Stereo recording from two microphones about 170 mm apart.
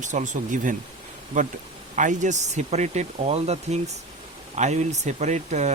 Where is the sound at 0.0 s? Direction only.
45° right (ahead or behind).